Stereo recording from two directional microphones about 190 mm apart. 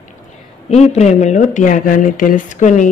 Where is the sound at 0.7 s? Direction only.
35° left (ahead or behind).